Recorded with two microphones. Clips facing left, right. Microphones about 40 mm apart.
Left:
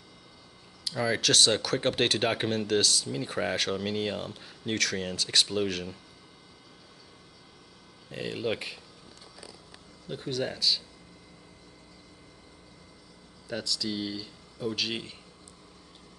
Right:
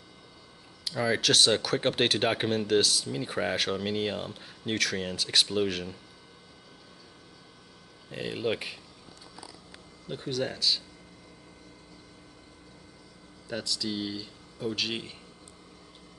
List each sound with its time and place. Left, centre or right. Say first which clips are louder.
0.8 s speech: right 1 dB; centre
8.1 s speech: right 1 dB; centre
10.0 s speech: even; centre
13.5 s speech: even; centre